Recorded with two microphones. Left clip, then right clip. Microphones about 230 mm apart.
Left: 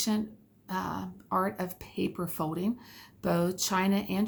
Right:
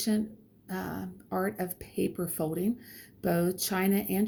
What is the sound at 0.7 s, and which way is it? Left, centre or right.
Speech, left.